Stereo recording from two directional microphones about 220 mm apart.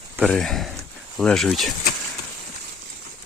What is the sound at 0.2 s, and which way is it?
Speech, centre (ahead or behind).